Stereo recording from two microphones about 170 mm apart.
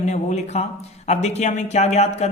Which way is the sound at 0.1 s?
40° left (ahead or behind).